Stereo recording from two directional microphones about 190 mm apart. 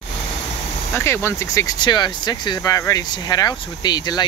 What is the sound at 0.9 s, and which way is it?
Speech, 15° left (ahead or behind).